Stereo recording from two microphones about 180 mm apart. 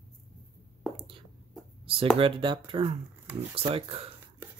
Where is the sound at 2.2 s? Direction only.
30° right (ahead or behind).